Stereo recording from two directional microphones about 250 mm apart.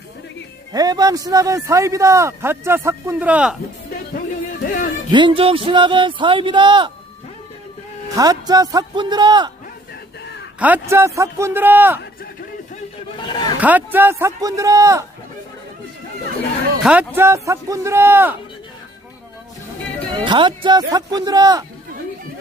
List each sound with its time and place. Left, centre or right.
0.7 s a man's voice: centre
4.6 s speech: left
5.1 s speech: centre
8.1 s a man's voice: centre
10.6 s a man's voice: centre
13.1 s speech: centre
13.6 s a man's voice: centre
16.8 s a man's voice: centre
20.1 s a man's voice: centre